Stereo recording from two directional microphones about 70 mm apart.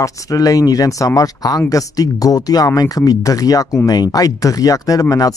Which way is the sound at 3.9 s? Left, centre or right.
Left.